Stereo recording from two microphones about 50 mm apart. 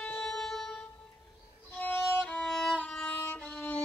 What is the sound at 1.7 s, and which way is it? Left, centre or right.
Violin, left.